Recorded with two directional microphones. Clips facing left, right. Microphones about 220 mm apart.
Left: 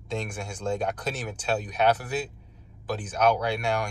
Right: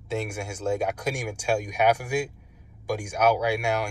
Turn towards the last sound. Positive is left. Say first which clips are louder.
# right 2 dB
turn(degrees=-10)  # may be behind; listen again after turning